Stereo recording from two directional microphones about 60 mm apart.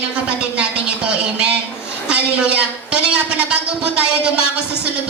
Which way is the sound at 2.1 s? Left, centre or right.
Centre.